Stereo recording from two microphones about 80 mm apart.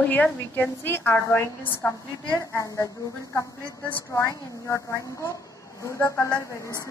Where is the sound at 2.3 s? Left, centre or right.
Left.